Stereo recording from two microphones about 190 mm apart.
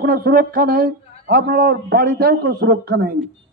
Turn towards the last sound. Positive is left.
turn(degrees=-55)  # may be behind; listen again after turning